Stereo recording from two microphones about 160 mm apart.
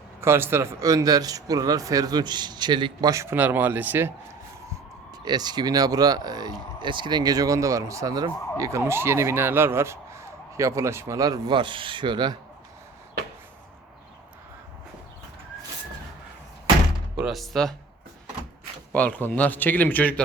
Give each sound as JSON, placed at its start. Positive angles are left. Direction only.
{"t": 0.2, "sound": "speech", "side_deg": -15}
{"t": 5.2, "sound": "speech", "side_deg": -25}
{"t": 17.2, "sound": "speech", "side_deg": 0}
{"t": 18.9, "sound": "speech", "side_deg": 10}